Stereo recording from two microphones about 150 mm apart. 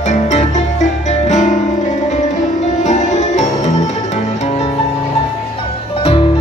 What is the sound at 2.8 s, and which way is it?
Music, 50° left (ahead or behind).